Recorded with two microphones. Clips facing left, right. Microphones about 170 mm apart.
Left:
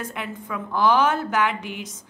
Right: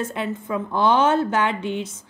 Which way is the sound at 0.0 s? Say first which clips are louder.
Right 6 dB; 30° right (ahead or behind).